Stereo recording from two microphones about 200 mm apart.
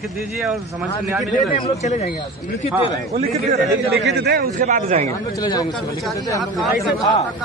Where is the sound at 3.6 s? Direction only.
55° right (ahead or behind); by 5.0 s 40° right (ahead or behind).